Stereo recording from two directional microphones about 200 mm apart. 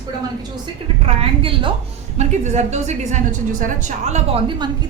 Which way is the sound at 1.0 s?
25° right (ahead or behind).